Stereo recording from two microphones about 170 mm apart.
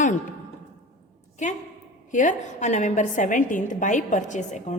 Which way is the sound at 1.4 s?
45° left (ahead or behind).